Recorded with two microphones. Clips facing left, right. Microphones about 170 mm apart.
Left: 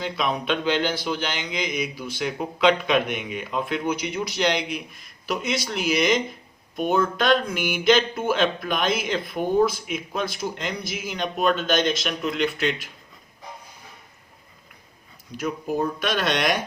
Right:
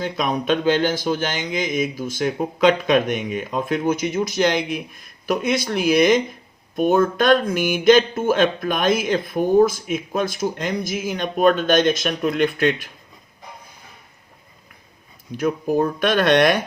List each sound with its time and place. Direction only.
0.0 s speech: 45° right (ahead or behind)
15.4 s speech: 55° right (ahead or behind)